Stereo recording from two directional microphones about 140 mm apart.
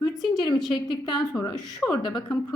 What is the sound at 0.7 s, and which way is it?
Speech, 30° left (ahead or behind).